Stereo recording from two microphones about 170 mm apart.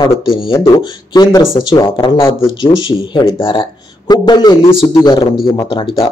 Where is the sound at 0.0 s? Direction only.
30° left (ahead or behind).